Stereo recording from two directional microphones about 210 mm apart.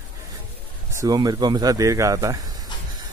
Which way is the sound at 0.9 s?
15° right (ahead or behind).